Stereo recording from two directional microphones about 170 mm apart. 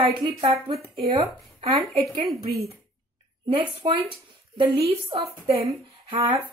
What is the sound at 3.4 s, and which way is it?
Speech, 30° right (ahead or behind).